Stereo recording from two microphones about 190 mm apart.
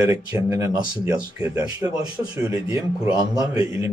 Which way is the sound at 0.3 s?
15° right (ahead or behind).